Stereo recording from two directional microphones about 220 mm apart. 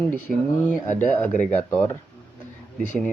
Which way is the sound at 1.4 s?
5° left (ahead or behind).